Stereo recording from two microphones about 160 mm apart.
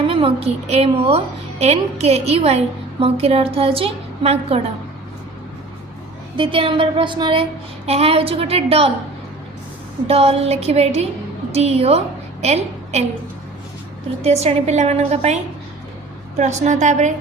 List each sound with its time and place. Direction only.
0.0 s a woman's voice: 35° right (ahead or behind)
6.3 s a woman's voice: 30° right (ahead or behind)
10.1 s a woman's voice: 40° right (ahead or behind)
14.2 s a woman's voice: 40° right (ahead or behind)
16.4 s a woman's voice: 45° right (ahead or behind)